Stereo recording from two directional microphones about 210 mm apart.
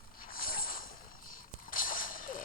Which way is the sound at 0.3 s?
45° left (ahead or behind).